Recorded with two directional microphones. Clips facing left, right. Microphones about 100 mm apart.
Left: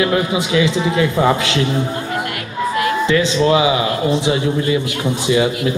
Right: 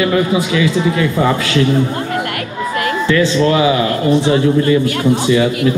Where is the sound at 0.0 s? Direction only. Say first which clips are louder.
Right 3 dB; 20° left (ahead or behind).